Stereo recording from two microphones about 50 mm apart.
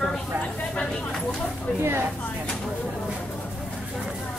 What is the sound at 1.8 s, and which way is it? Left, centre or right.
Speech, right.